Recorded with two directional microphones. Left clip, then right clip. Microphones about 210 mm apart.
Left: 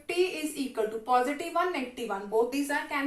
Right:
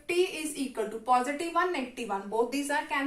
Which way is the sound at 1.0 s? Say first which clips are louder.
Right 1 dB; 20° right (ahead or behind).